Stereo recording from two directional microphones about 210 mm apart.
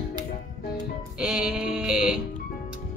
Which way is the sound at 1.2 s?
5° right (ahead or behind).